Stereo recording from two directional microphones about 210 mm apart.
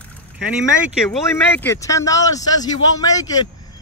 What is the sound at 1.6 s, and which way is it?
A man's voice, 15° left (ahead or behind).